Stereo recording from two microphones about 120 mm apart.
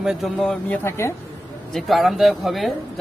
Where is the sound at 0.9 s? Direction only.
20° left (ahead or behind).